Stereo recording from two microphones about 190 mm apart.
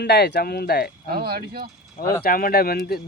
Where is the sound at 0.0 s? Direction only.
60° left (ahead or behind).